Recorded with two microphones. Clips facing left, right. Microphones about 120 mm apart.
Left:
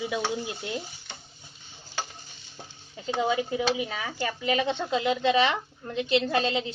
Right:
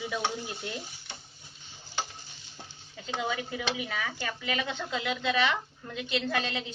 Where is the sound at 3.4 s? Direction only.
20° left (ahead or behind).